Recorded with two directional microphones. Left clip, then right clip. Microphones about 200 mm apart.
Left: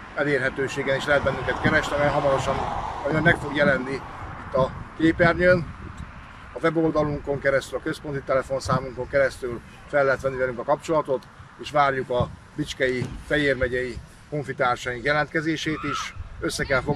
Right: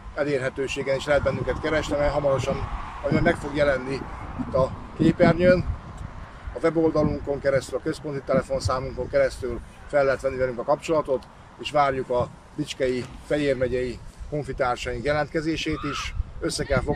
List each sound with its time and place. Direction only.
0.1 s speech: 10° right (ahead or behind)
2.5 s speech: 40° left (ahead or behind)
3.1 s speech: 10° right (ahead or behind)